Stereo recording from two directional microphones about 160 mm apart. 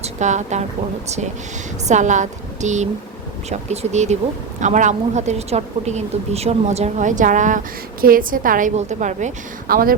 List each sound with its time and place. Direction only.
0.0 s a woman's voice: 50° right (ahead or behind)
1.9 s a woman's voice: 50° right (ahead or behind)